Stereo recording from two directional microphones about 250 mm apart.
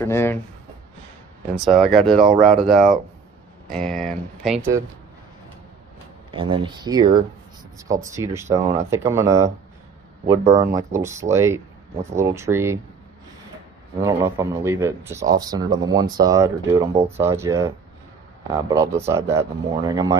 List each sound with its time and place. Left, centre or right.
0.0 s speech: centre
1.5 s speech: centre
6.3 s speech: centre
14.0 s speech: centre